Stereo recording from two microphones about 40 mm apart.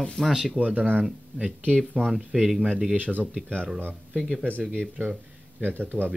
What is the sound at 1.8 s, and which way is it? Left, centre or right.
Speech, centre.